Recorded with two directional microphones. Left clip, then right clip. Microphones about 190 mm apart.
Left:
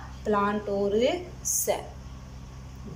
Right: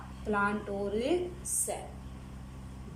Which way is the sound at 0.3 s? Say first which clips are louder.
Left 5 dB; 35° left (ahead or behind).